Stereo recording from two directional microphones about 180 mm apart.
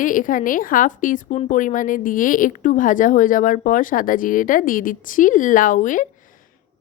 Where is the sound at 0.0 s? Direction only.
50° left (ahead or behind).